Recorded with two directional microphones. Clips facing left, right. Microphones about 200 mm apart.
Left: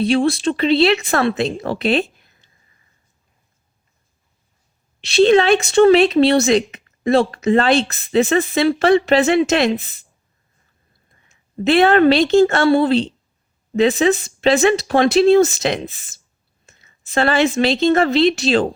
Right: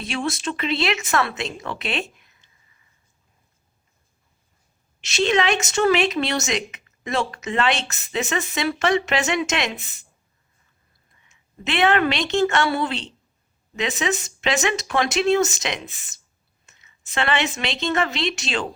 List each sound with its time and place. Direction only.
0.0 s speech: 35° left (ahead or behind)
4.9 s speech: 35° left (ahead or behind)
11.1 s a woman's voice: 40° left (ahead or behind)